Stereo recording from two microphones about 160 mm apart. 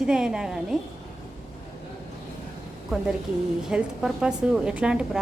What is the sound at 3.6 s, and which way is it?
A woman's voice, 5° right (ahead or behind).